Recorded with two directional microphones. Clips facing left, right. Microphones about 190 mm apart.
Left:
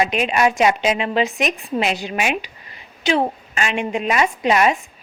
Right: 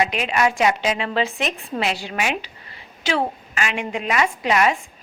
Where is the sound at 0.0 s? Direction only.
20° left (ahead or behind).